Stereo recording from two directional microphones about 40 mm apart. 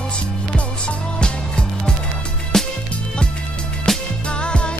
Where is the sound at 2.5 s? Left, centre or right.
Centre.